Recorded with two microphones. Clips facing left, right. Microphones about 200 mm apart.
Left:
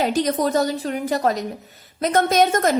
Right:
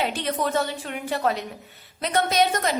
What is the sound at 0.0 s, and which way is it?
A woman's voice, 40° left (ahead or behind).